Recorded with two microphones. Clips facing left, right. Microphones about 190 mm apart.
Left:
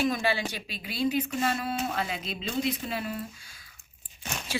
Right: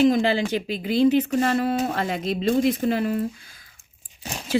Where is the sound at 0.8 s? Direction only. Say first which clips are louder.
Right 9 dB; 45° right (ahead or behind).